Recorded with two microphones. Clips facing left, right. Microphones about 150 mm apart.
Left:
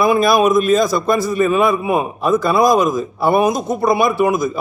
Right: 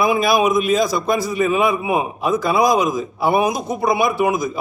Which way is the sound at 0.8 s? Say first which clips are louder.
Left 3 dB; 50° left (ahead or behind).